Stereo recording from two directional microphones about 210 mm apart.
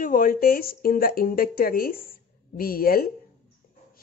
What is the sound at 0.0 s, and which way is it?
Speech, 40° left (ahead or behind).